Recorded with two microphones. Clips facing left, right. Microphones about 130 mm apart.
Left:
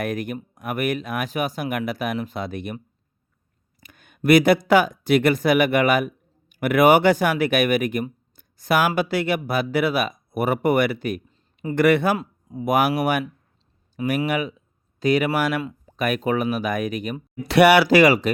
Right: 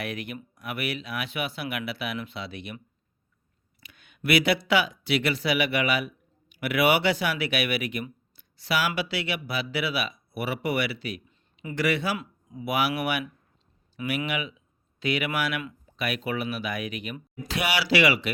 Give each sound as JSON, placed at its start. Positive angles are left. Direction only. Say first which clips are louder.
{"t": 0.0, "sound": "speech", "louder": "left 7 dB", "side_deg": 45}
{"t": 11.7, "sound": "speech", "louder": "left 9 dB", "side_deg": 55}
{"t": 17.4, "sound": "speech", "louder": "left 14 dB", "side_deg": 65}